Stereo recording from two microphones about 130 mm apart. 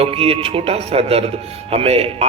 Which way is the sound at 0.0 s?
50° right (ahead or behind).